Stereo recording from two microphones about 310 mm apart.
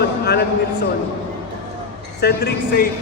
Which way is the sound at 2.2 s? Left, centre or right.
Left.